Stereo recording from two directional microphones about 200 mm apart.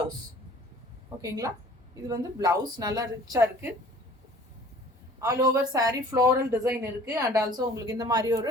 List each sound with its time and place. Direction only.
1.2 s a woman's voice: 15° right (ahead or behind)
5.2 s a woman's voice: 15° right (ahead or behind)